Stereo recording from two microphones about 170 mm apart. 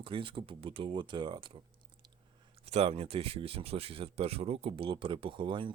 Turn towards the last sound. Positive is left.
turn(degrees=-30)  # may be behind; listen again after turning